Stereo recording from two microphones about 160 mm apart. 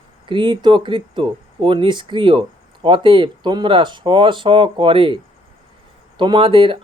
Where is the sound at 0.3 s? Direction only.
30° right (ahead or behind).